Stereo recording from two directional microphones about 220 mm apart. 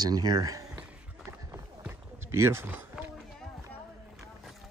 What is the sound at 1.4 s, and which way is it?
Run, 15° right (ahead or behind).